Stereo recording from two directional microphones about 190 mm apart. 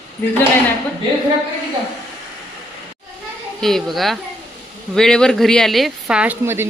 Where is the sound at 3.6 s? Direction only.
Centre (ahead or behind).